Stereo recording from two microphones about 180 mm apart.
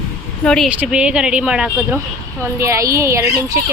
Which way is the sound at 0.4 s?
5° left (ahead or behind).